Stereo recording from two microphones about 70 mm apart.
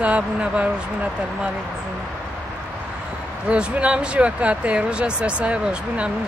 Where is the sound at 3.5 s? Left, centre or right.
Centre.